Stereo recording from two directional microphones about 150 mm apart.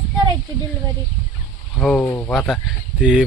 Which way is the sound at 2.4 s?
Centre (ahead or behind).